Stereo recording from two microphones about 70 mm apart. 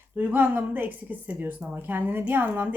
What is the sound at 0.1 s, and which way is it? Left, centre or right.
A woman's voice, right.